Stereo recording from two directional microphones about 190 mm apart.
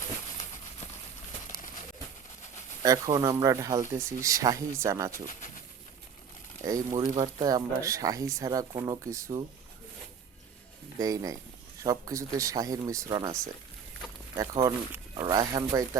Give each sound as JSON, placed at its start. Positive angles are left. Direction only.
{"t": 2.8, "sound": "speech", "side_deg": -20}
{"t": 6.7, "sound": "speech", "side_deg": -20}
{"t": 10.9, "sound": "speech", "side_deg": -20}
{"t": 14.3, "sound": "speech", "side_deg": -20}